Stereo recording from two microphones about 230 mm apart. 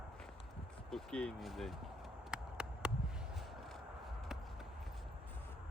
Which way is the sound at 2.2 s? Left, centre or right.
Centre.